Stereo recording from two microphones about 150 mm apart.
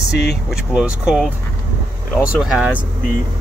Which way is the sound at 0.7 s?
5° right (ahead or behind).